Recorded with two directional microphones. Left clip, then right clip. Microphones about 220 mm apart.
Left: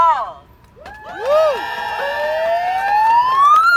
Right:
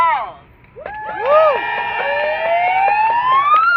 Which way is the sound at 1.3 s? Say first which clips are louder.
Right 2 dB; 55° left (ahead or behind).